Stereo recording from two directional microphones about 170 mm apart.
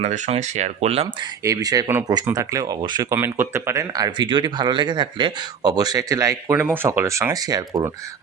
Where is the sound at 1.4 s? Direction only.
20° right (ahead or behind).